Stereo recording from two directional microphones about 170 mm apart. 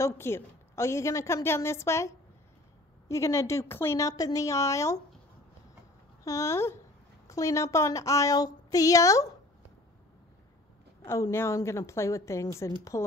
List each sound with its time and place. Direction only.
0.0 s a woman's voice: 15° left (ahead or behind)
6.2 s a woman's voice: 15° left (ahead or behind)
11.1 s a woman's voice: 15° left (ahead or behind)